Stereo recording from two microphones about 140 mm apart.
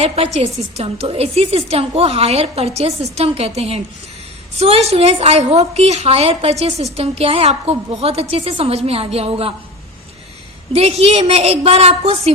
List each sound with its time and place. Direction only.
0.3 s a woman's voice: 45° right (ahead or behind)
10.7 s a woman's voice: 45° right (ahead or behind)